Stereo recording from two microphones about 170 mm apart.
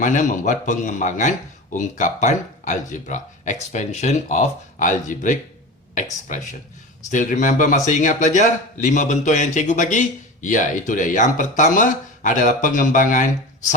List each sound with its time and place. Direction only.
0.0 s a man's voice: 45° left (ahead or behind)